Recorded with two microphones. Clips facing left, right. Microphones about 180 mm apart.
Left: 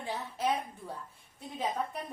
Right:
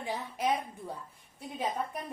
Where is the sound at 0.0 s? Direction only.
15° right (ahead or behind).